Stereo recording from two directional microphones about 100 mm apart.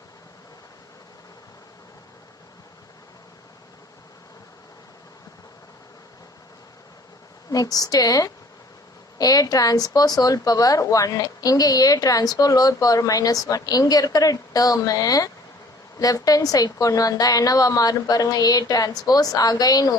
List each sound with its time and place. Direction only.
7.5 s speech: 40° left (ahead or behind)